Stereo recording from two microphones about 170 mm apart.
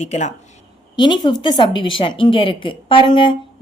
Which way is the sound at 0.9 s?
25° left (ahead or behind).